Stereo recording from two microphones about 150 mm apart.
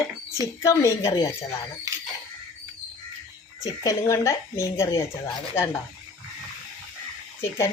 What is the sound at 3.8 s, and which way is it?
Speech, 20° left (ahead or behind).